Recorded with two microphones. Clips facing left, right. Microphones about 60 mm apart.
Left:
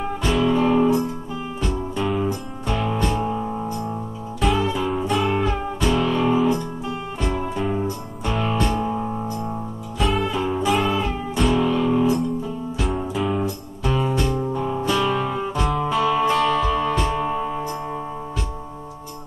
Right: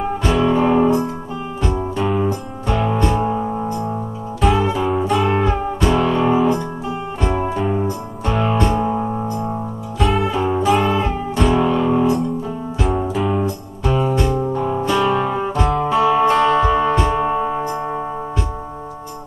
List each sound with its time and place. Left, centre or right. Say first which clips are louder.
0.4 s music: right 3 dB; right
4.4 s music: right 4 dB; centre
4.6 s music: right 4 dB; right
5.0 s music: right 3 dB; centre
5.3 s music: right 4 dB; centre
7.2 s music: right 5 dB; right
7.5 s music: right 4 dB; centre
9.9 s music: right 4 dB; centre
10.2 s music: right 4 dB; centre
10.6 s music: right 4 dB; centre
11.5 s music: right 3 dB; centre
12.7 s music: right 5 dB; centre
13.8 s music: right 4 dB; centre